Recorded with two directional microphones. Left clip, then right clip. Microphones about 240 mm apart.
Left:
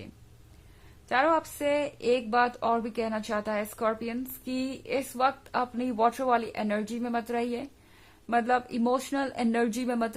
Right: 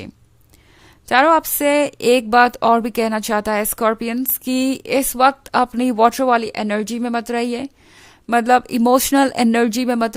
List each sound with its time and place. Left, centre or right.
1.0 s a woman's voice: right